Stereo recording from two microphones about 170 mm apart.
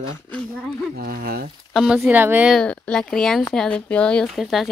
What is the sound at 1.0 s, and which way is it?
Speech, 65° right (ahead or behind).